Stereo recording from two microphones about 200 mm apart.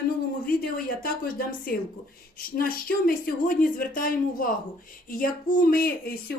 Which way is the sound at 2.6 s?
45° left (ahead or behind).